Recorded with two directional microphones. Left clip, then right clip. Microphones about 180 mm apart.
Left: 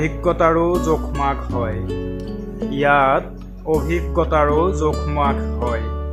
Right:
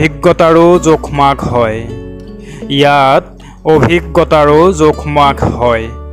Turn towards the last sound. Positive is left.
turn(degrees=-50)  # may be behind; listen again after turning